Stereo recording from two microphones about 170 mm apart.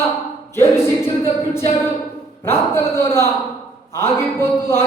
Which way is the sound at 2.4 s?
15° left (ahead or behind).